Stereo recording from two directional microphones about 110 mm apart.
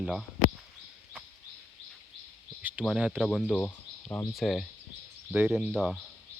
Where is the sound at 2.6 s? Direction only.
15° right (ahead or behind).